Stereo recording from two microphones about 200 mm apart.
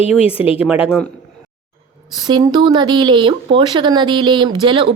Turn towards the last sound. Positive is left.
turn(degrees=-25)  # may be behind; listen again after turning